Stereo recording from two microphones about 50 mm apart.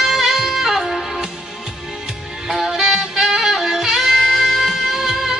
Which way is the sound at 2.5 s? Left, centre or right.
Centre.